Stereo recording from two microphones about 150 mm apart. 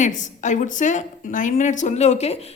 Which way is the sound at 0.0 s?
55° left (ahead or behind).